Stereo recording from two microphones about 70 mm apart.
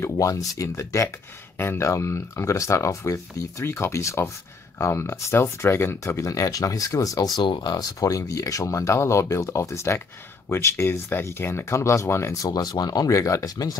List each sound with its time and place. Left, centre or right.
0.0 s speech: left
6.0 s speech: left
7.2 s speech: left
12.4 s speech: left